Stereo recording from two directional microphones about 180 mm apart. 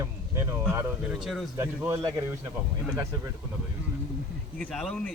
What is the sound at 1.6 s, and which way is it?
Speech, 15° right (ahead or behind).